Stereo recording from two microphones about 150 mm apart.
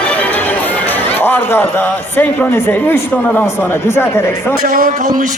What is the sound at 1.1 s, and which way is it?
A man's voice, 15° left (ahead or behind).